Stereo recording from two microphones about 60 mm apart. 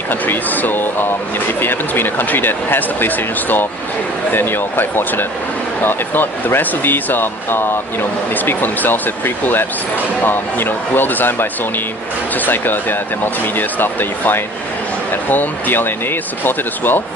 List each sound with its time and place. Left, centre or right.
0.1 s speech: left
4.3 s speech: left
12.5 s speech: left